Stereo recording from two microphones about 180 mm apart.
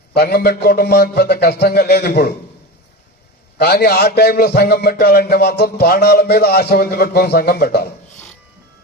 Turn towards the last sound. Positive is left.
turn(degrees=65)  # may be behind; listen again after turning